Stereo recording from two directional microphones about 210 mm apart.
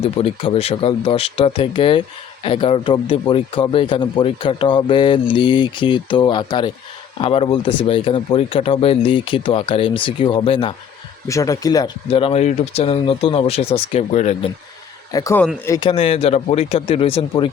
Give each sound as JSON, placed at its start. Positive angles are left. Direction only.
{"t": 0.0, "sound": "speech", "side_deg": 30}
{"t": 15.1, "sound": "speech", "side_deg": 15}